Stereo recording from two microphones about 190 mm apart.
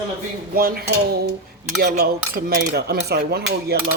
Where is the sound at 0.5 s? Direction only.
50° right (ahead or behind).